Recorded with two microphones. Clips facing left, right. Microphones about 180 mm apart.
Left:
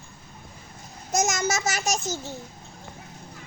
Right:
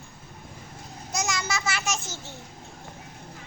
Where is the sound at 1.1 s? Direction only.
45° left (ahead or behind).